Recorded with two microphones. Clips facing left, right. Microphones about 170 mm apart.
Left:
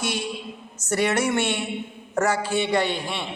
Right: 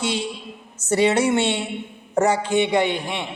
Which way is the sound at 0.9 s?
25° right (ahead or behind).